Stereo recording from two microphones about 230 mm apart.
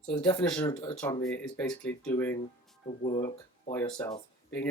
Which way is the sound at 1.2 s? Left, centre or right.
Centre.